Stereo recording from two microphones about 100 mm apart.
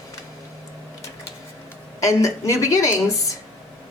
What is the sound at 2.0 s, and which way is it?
Speech, 30° left (ahead or behind).